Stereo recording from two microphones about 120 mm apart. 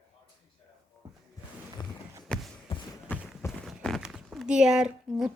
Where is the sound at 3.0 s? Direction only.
15° left (ahead or behind).